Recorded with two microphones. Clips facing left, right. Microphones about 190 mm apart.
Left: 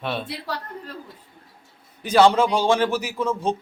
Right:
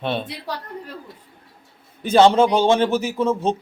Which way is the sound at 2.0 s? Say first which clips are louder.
Right 3 dB; 25° right (ahead or behind).